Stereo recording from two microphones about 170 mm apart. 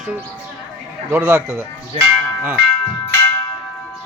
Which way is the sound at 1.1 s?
10° right (ahead or behind).